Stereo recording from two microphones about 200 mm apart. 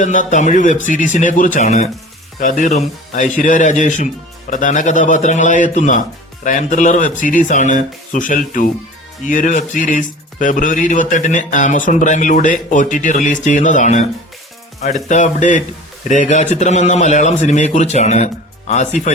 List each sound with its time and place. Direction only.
0.0 s a man's voice: 40° left (ahead or behind)